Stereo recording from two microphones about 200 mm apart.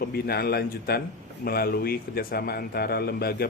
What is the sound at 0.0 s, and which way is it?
A man's voice, 50° left (ahead or behind).